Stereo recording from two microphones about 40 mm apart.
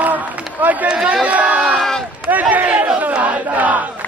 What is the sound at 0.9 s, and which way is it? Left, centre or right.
Chatter, right.